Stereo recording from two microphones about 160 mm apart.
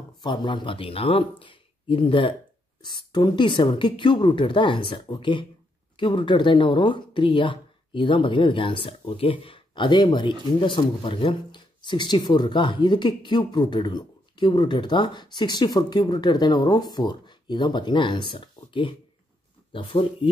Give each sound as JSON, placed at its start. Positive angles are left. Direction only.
{"t": 0.2, "sound": "speech", "side_deg": 30}